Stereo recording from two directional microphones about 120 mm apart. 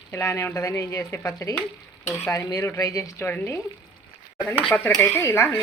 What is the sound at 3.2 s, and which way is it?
Dishes, 15° left (ahead or behind).